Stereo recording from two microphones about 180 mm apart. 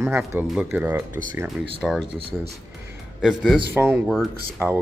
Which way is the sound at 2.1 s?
30° right (ahead or behind).